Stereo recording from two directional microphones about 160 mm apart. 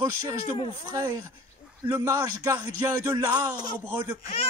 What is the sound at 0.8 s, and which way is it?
Speech, 20° right (ahead or behind).